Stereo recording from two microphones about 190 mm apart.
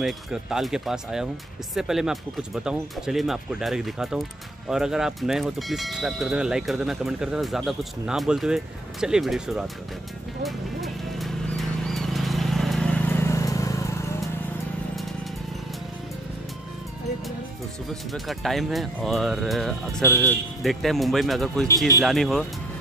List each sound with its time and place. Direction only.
0.0 s speech: centre (ahead or behind)
10.4 s horse: centre (ahead or behind); by 14.0 s 15° left (ahead or behind)
18.1 s speech: centre (ahead or behind)
21.6 s speech: 15° left (ahead or behind)
22.0 s speech: centre (ahead or behind)